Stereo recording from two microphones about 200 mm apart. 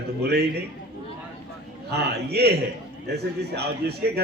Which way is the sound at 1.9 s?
55° right (ahead or behind).